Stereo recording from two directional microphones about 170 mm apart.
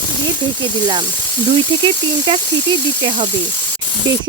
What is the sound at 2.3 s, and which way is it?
Speech, 30° right (ahead or behind).